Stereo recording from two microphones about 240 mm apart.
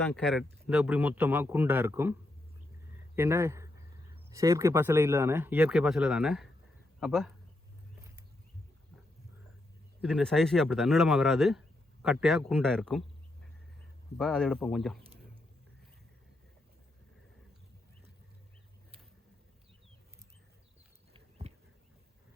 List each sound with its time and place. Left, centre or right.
0.0 s speech: centre
3.2 s speech: centre
10.0 s speech: centre
14.2 s speech: centre
21.1 s a sound: right